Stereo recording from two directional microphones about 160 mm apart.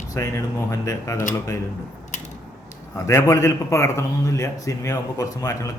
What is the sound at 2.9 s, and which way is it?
A man's voice, 20° left (ahead or behind).